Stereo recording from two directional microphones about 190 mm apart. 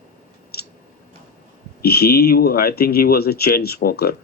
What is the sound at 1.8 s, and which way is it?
Speech, 55° left (ahead or behind).